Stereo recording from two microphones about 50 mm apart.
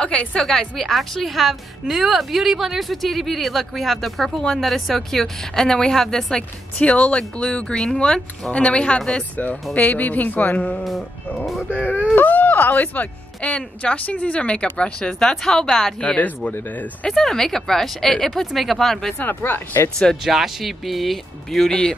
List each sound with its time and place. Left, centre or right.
0.0 s a woman's voice: left
0.4 s a woman's voice: centre
4.6 s speech: centre
6.8 s a woman's voice: left
7.6 s a woman's voice: centre
9.8 s speech: left
10.8 s a woman's voice: centre
11.7 s a woman's voice: left; by 15.9 s centre
16.7 s speech: left
17.1 s speech: centre
19.1 s speech: left
20.2 s a woman's voice: centre